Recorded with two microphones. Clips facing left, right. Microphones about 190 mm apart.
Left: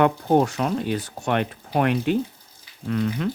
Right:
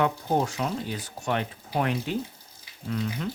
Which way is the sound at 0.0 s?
65° left (ahead or behind).